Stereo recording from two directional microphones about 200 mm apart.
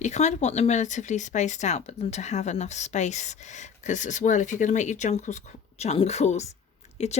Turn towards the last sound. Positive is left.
turn(degrees=35)  # may be behind; listen again after turning